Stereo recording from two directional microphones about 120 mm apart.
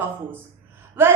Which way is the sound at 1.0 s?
20° right (ahead or behind).